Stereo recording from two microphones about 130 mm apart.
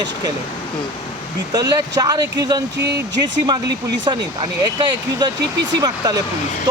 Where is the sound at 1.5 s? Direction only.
30° right (ahead or behind).